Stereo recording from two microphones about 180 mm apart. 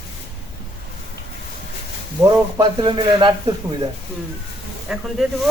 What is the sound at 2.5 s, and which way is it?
Speech, 20° right (ahead or behind).